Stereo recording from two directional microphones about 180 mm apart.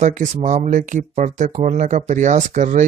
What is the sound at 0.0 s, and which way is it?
Speech, 45° right (ahead or behind).